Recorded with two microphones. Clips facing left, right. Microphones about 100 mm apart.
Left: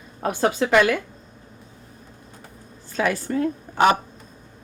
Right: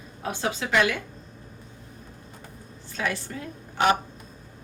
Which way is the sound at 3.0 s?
55° left (ahead or behind).